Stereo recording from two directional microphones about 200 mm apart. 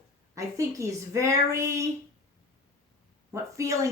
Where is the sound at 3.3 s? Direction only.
15° right (ahead or behind).